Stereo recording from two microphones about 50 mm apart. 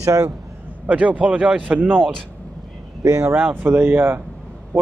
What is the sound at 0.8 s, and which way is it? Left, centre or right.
Speech, right.